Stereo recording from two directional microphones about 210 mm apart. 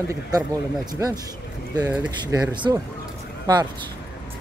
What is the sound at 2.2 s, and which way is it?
Speech, 15° right (ahead or behind).